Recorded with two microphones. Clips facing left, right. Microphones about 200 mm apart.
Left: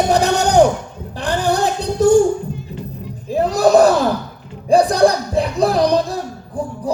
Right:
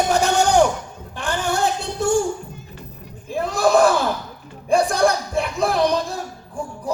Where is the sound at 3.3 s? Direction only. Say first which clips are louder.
Left 5 dB; 35° left (ahead or behind).